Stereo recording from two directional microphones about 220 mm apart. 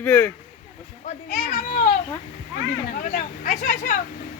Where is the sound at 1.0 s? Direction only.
35° left (ahead or behind).